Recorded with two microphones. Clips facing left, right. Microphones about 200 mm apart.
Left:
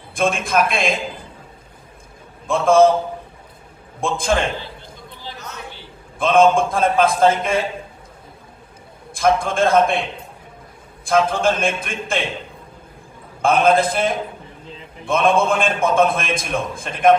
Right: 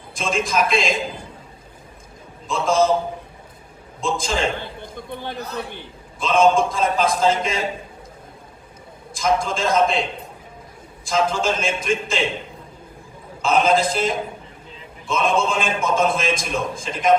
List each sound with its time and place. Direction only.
0.1 s a man's voice: 55° left (ahead or behind)
2.5 s a man's voice: 55° left (ahead or behind)
4.0 s a man's voice: 55° left (ahead or behind)
4.5 s a sound: 55° right (ahead or behind)
5.4 s a man's voice: 35° right (ahead or behind)
6.1 s a man's voice: 55° left (ahead or behind)
9.1 s a man's voice: 55° left (ahead or behind)
13.4 s a man's voice: 55° left (ahead or behind)